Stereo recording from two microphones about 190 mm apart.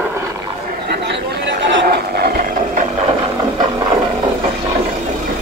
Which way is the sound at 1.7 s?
55° right (ahead or behind).